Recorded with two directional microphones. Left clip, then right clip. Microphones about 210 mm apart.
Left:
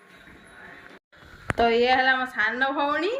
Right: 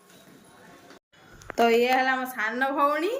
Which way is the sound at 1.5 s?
20° right (ahead or behind).